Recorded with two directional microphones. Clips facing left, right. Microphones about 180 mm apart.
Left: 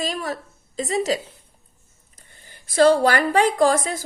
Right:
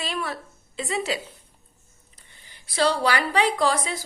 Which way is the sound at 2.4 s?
45° left (ahead or behind).